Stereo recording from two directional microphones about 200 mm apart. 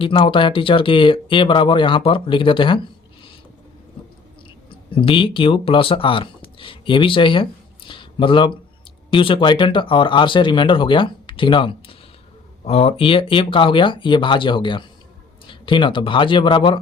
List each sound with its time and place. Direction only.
0.0 s speech: 25° left (ahead or behind)
4.9 s speech: 25° left (ahead or behind)